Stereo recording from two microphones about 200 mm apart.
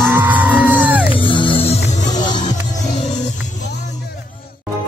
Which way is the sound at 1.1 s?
25° left (ahead or behind).